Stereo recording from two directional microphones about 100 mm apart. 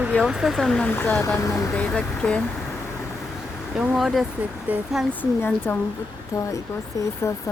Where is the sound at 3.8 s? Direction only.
Centre (ahead or behind).